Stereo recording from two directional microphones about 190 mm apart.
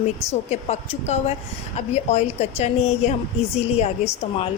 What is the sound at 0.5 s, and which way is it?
A woman's voice, 35° left (ahead or behind).